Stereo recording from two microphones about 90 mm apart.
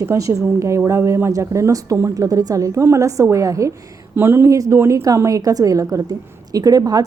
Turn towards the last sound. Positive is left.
turn(degrees=-45)  # may be behind; listen again after turning